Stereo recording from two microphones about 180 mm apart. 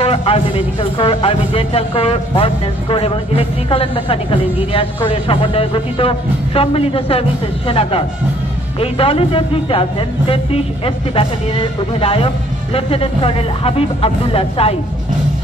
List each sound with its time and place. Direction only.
0.0 s music: 30° left (ahead or behind)
0.9 s speech: 30° left (ahead or behind)